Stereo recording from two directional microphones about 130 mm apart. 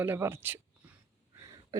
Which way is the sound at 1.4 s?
30° right (ahead or behind).